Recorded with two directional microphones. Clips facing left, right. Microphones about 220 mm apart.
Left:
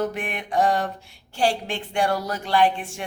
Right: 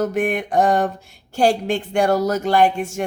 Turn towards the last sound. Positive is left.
turn(degrees=-45)  # may be behind; listen again after turning